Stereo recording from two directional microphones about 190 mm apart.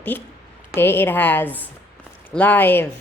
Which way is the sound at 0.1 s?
10° left (ahead or behind).